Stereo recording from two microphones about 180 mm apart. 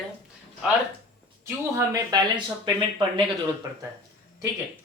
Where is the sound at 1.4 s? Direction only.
20° right (ahead or behind).